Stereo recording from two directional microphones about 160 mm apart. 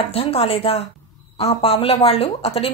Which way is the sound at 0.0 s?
35° left (ahead or behind).